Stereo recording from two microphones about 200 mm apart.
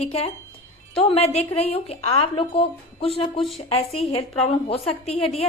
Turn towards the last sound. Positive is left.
turn(degrees=30)  # may be behind; listen again after turning